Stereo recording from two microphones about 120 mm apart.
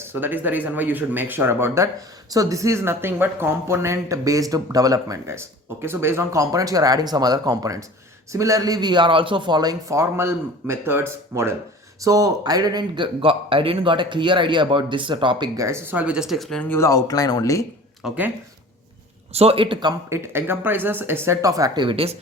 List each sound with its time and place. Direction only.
0.0 s speech: 15° right (ahead or behind); by 15.4 s 40° right (ahead or behind)
15.5 s speech: 25° right (ahead or behind); by 16.6 s 5° left (ahead or behind)
16.6 s speech: 20° left (ahead or behind)
18.0 s speech: 5° right (ahead or behind)
19.3 s speech: 60° right (ahead or behind); by 20.0 s 40° right (ahead or behind)
20.1 s speech: 20° right (ahead or behind)
21.8 s speech: 55° right (ahead or behind)